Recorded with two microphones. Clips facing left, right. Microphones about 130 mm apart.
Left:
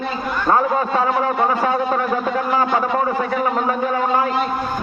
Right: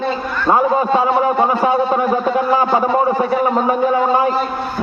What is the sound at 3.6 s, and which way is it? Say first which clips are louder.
Speech: right 5 dB; 20° right (ahead or behind).